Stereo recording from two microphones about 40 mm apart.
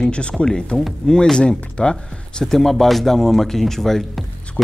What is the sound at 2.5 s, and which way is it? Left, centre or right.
Speech, centre.